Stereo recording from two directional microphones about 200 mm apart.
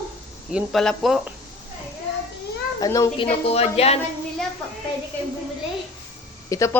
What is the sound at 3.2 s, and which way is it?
Speech, 30° left (ahead or behind).